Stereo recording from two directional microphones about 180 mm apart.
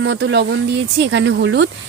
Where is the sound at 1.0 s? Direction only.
90° right.